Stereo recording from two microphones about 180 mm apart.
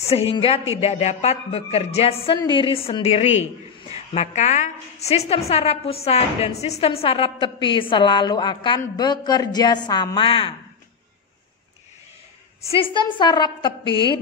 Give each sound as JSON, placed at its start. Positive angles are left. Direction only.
{"t": 0.0, "sound": "a woman's voice", "side_deg": 30}
{"t": 12.8, "sound": "a woman's voice", "side_deg": 25}